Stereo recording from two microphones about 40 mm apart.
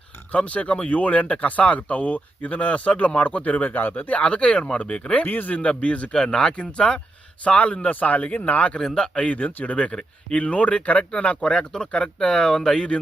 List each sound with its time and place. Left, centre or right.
0.3 s speech: left
3.8 s speech: left
4.1 s speech: left
5.2 s speech: left
5.6 s speech: left
6.1 s speech: centre